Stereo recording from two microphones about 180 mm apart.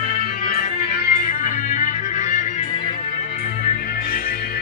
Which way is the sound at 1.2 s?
45° left (ahead or behind).